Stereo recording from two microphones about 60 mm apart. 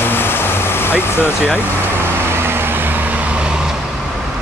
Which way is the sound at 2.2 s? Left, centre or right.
Right.